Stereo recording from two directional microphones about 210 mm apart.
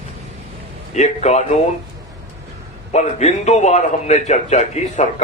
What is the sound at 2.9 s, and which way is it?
Speech, 35° left (ahead or behind).